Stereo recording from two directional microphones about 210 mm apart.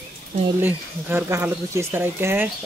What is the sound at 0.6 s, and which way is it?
Speech, 10° right (ahead or behind).